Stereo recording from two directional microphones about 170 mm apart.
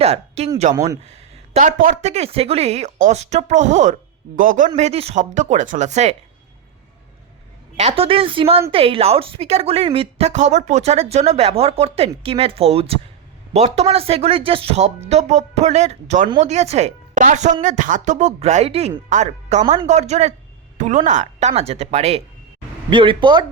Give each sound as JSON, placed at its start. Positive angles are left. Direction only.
{"t": 0.0, "sound": "a woman's voice", "side_deg": -35}
{"t": 4.8, "sound": "speech", "side_deg": -40}
{"t": 7.8, "sound": "a woman's voice", "side_deg": -35}